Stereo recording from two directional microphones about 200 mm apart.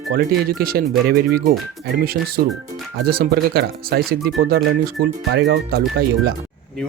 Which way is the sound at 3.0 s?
50° right (ahead or behind).